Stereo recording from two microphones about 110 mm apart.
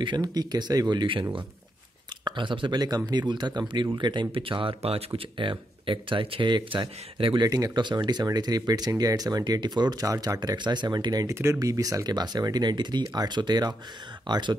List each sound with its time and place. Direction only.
0.0 s speech: 40° right (ahead or behind)
2.2 s speech: 45° right (ahead or behind)
7.4 s speech: 35° right (ahead or behind)
11.3 s speech: 25° right (ahead or behind); by 14.6 s 40° right (ahead or behind)